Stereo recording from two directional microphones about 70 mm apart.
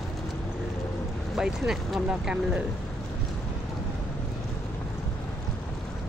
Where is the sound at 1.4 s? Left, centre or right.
Centre.